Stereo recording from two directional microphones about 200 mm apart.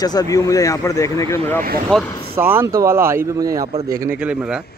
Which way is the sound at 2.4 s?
10° right (ahead or behind).